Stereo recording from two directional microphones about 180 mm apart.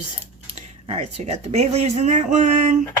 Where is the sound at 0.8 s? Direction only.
35° right (ahead or behind).